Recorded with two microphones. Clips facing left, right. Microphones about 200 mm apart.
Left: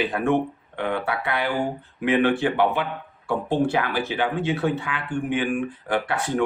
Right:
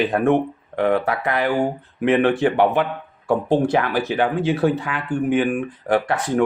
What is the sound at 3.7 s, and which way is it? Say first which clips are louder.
Speech: right 5 dB; 40° right (ahead or behind).